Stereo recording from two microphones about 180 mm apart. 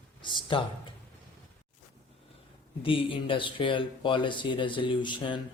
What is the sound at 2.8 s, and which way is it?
Speech, 30° left (ahead or behind).